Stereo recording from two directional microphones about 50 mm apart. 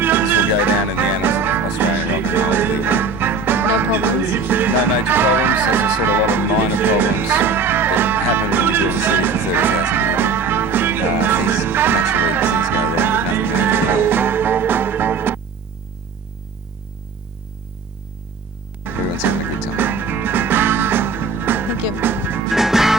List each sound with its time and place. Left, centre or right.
0.0 s music: right
18.9 s music: right
22.5 s music: centre